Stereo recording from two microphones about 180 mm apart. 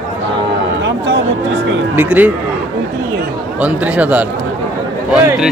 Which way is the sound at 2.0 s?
10° right (ahead or behind).